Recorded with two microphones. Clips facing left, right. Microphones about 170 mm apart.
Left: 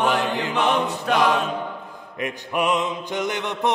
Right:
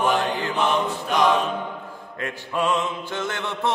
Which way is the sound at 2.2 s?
15° left (ahead or behind).